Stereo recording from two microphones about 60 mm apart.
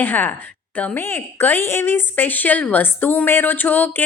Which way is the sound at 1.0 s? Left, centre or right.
Left.